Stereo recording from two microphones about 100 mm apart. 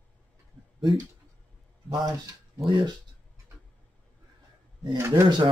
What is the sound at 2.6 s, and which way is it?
Mantra, 55° right (ahead or behind).